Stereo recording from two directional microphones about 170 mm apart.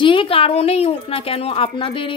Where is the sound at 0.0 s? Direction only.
30° left (ahead or behind).